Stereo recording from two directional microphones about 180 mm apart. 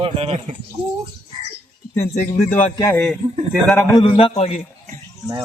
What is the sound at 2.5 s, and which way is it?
Speech, 10° left (ahead or behind).